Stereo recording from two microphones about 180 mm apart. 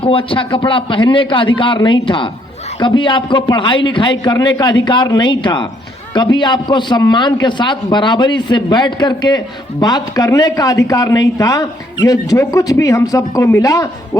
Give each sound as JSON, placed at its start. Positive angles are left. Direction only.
{"t": 0.0, "sound": "a man's voice", "side_deg": 30}